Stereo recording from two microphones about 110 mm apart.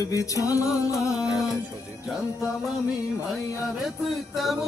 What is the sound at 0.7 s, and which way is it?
Music, 5° right (ahead or behind).